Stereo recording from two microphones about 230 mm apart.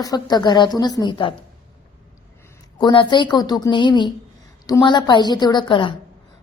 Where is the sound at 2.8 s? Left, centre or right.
Centre.